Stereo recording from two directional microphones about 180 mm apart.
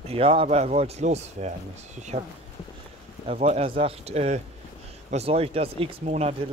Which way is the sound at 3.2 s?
35° right (ahead or behind).